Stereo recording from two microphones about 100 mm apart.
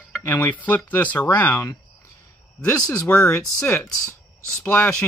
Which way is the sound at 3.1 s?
20° left (ahead or behind).